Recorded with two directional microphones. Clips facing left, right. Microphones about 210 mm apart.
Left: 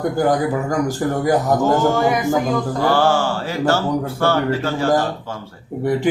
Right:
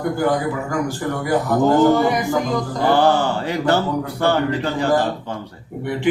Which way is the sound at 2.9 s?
20° right (ahead or behind).